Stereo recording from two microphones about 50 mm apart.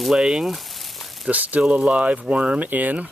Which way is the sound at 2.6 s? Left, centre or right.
Right.